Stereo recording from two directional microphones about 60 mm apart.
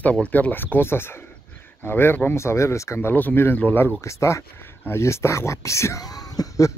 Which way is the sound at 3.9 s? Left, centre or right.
Left.